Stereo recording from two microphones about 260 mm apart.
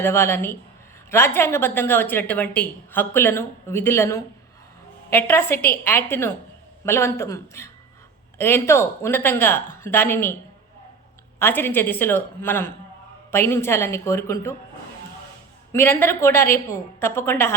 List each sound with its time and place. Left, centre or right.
0.0 s a woman's voice: centre
11.3 s a woman's voice: centre
15.7 s a woman's voice: centre